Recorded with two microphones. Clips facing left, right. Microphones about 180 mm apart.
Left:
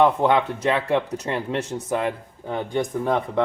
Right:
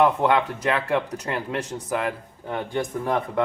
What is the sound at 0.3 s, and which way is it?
Speech, 25° left (ahead or behind).